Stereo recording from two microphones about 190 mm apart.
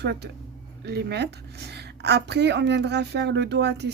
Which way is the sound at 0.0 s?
60° right (ahead or behind).